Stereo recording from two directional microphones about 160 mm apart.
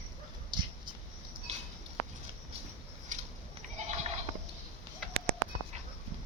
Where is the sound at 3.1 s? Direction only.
50° right (ahead or behind).